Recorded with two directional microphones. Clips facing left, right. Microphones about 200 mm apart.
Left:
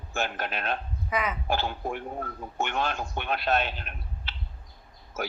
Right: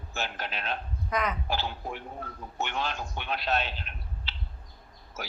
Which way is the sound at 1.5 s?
50° left (ahead or behind).